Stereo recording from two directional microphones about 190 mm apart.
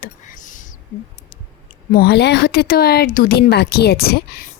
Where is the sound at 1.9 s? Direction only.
55° left (ahead or behind).